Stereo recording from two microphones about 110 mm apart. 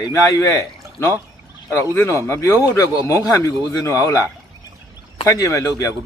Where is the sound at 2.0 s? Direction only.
25° left (ahead or behind).